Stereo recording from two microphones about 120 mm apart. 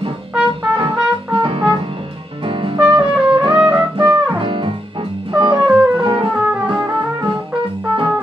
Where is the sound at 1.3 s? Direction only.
45° right (ahead or behind).